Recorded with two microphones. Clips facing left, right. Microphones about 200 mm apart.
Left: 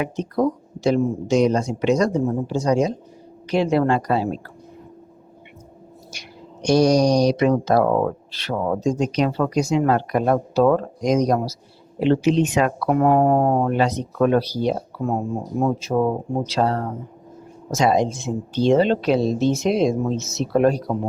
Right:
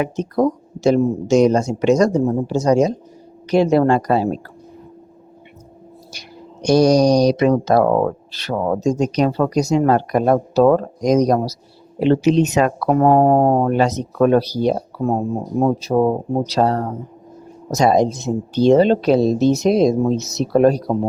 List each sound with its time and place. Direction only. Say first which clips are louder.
0.0 s speech: right 3 dB; 45° right (ahead or behind)
6.1 s speech: right 2 dB; 35° right (ahead or behind)